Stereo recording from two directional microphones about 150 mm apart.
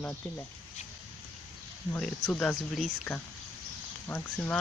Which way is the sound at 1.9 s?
5° left (ahead or behind).